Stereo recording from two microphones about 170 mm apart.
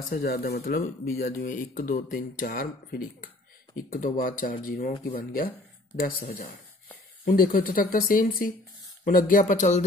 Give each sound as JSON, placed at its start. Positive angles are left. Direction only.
{"t": 0.1, "sound": "speech", "side_deg": 65}